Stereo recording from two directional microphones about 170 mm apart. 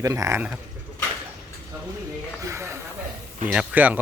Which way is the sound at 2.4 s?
15° right (ahead or behind).